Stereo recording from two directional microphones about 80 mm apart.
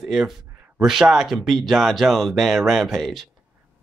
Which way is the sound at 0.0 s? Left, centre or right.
Centre.